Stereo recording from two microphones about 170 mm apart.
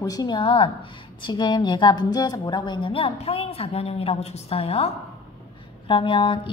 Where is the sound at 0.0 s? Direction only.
20° left (ahead or behind).